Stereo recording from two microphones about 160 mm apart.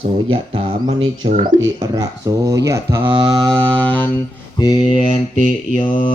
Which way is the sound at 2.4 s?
20° right (ahead or behind).